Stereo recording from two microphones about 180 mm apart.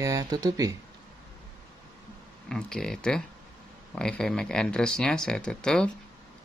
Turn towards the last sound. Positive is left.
turn(degrees=5)  # may be behind; listen again after turning